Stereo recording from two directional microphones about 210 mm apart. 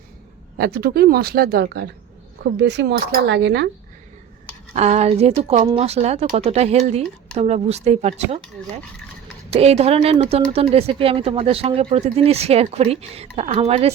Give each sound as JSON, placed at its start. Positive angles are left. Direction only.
{"t": 0.6, "sound": "speech", "side_deg": -50}
{"t": 4.7, "sound": "speech", "side_deg": -35}
{"t": 9.5, "sound": "speech", "side_deg": -30}